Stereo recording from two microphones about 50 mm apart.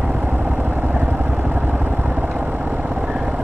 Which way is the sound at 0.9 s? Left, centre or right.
Right.